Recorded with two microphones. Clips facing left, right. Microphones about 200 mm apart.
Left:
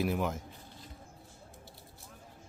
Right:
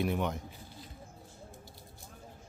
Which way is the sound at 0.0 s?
Centre (ahead or behind).